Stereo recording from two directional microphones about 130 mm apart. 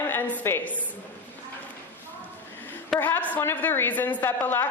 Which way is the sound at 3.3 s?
15° left (ahead or behind).